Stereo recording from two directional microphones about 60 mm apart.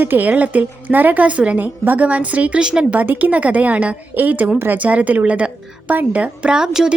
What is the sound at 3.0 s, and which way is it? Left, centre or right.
A woman's voice, right.